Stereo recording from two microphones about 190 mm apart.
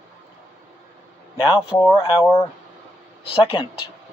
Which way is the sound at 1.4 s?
30° left (ahead or behind).